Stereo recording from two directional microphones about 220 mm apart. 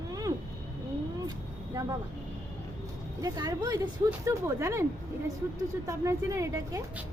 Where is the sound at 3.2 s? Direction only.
15° right (ahead or behind).